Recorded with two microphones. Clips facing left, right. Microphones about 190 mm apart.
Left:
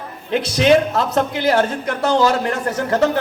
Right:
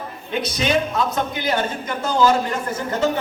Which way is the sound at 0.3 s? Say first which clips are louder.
Left 8 dB; 75° left (ahead or behind).